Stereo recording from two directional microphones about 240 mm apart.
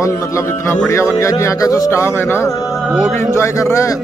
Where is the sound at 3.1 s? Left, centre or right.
Centre.